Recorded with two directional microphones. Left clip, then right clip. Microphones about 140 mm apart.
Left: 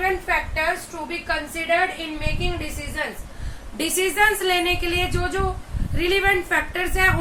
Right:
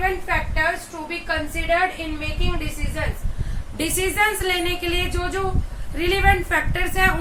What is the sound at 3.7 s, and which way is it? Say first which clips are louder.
A woman's voice: left 1 dB; 5° right (ahead or behind).